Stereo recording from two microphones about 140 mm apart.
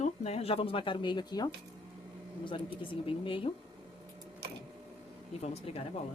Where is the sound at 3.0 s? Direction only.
40° left (ahead or behind).